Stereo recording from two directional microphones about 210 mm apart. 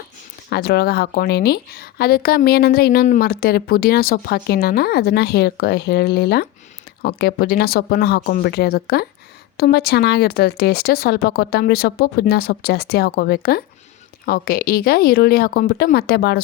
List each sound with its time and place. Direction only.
0.5 s a woman's voice: 50° left (ahead or behind)